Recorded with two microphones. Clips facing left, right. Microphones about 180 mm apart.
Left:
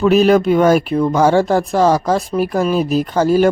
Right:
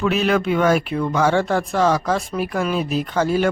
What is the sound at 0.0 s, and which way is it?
Speech, 40° left (ahead or behind).